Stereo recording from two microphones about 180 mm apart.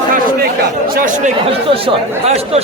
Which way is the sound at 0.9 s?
45° right (ahead or behind).